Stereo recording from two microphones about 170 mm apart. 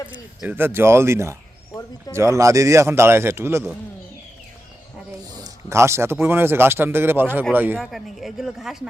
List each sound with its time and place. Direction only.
0.1 s speech: 10° right (ahead or behind)
5.4 s speech: 15° right (ahead or behind)
7.8 s speech: centre (ahead or behind)